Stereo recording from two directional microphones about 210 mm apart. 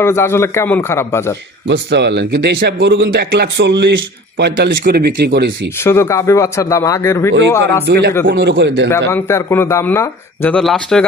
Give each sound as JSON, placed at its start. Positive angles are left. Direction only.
{"t": 0.0, "sound": "speech", "side_deg": 10}
{"t": 1.7, "sound": "speech", "side_deg": -55}
{"t": 5.9, "sound": "speech", "side_deg": 15}
{"t": 7.8, "sound": "speech", "side_deg": -55}
{"t": 9.1, "sound": "speech", "side_deg": 10}